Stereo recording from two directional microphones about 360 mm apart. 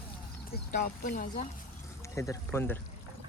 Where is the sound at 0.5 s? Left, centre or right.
Left.